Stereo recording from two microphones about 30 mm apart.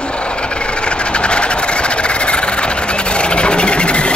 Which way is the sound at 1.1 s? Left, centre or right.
Left.